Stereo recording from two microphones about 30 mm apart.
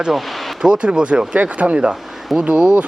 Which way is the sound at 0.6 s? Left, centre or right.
Right.